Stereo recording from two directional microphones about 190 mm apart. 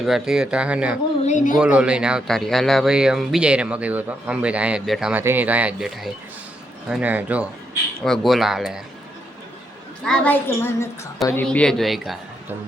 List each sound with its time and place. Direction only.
0.0 s speech: centre (ahead or behind)
1.2 s speech: 40° left (ahead or behind)
1.5 s speech: 5° right (ahead or behind)
10.0 s a woman's voice: 5° left (ahead or behind)